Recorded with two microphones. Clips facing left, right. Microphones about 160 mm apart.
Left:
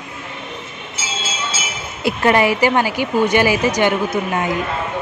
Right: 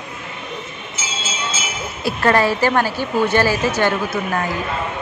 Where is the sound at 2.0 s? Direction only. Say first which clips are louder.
Left 2 dB; 15° left (ahead or behind).